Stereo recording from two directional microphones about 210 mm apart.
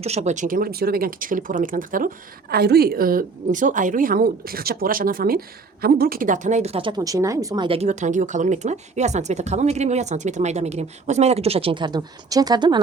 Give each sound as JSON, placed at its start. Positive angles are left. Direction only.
{"t": 0.0, "sound": "a woman's voice", "side_deg": -30}